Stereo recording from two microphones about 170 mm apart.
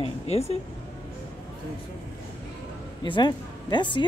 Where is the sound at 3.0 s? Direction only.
25° left (ahead or behind).